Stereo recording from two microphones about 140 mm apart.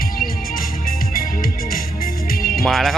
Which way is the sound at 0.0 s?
90° left.